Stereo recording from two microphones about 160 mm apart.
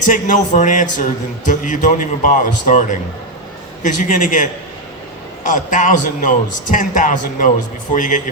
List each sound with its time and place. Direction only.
0.1 s speech: 55° left (ahead or behind)
5.5 s speech: 55° left (ahead or behind)